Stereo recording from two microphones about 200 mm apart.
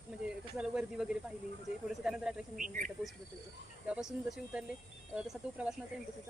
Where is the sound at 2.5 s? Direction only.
40° right (ahead or behind).